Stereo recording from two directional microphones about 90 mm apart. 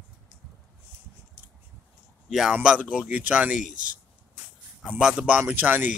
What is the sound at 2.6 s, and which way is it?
Speech, 15° right (ahead or behind).